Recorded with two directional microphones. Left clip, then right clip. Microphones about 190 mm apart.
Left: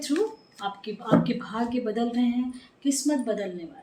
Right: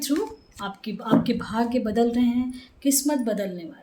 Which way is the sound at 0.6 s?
50° right (ahead or behind).